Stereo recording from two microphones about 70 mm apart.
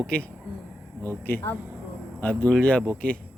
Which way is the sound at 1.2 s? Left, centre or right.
Left.